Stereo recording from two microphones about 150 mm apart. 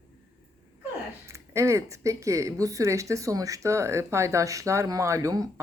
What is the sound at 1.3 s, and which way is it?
Speech, 20° right (ahead or behind).